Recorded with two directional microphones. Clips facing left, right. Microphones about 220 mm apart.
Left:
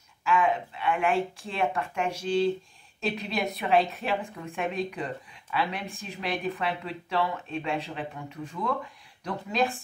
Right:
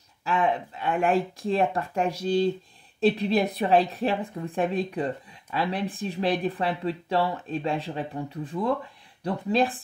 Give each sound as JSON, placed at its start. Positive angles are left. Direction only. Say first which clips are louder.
{"t": 0.2, "sound": "a woman's voice", "louder": "even", "side_deg": -35}